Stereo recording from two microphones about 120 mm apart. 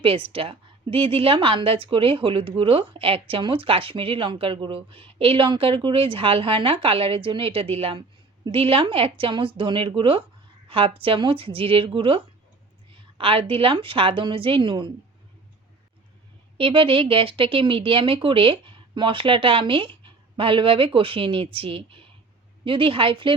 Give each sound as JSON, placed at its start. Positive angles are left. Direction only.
{"t": 0.0, "sound": "a woman's voice", "side_deg": -50}
{"t": 16.6, "sound": "a woman's voice", "side_deg": -45}